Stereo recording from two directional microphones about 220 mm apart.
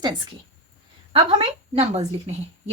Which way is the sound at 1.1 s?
25° right (ahead or behind).